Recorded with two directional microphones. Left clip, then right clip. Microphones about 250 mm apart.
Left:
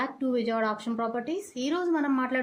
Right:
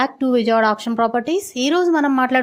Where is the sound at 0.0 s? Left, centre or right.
Right.